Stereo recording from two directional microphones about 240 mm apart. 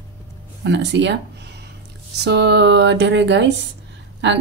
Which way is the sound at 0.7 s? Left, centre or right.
Right.